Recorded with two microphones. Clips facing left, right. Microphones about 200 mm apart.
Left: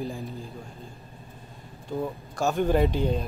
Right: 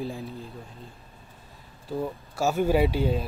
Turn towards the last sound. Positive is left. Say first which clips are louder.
# even
turn(degrees=-5)  # may be behind; listen again after turning